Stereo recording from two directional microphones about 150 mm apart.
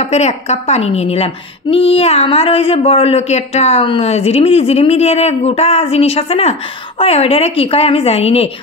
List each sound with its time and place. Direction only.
0.0 s a woman's voice: 50° left (ahead or behind)